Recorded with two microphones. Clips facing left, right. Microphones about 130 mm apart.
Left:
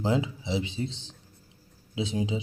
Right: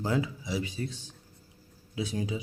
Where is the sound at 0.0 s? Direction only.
20° left (ahead or behind).